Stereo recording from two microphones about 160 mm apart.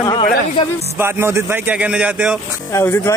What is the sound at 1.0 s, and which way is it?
A man's voice, 15° right (ahead or behind).